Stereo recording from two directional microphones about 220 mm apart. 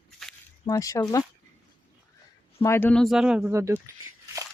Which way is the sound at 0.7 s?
15° left (ahead or behind).